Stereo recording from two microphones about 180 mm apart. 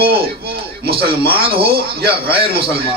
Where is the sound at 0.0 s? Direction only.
60° right (ahead or behind).